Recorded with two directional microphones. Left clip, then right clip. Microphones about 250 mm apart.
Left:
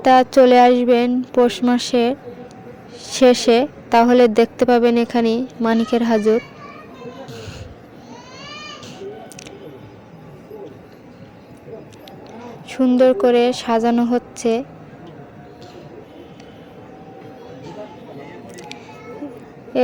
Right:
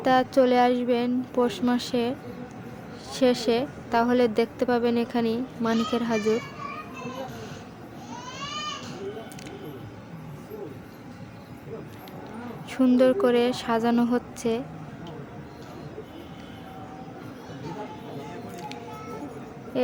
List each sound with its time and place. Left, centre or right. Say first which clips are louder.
0.0 s a woman's voice: left 9 dB; left
12.6 s a woman's voice: left 7 dB; centre
19.7 s a sound: left 9 dB; left